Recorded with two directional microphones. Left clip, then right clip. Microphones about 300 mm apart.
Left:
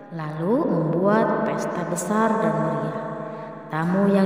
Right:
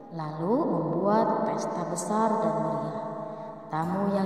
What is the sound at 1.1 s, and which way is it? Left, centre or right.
Music, left.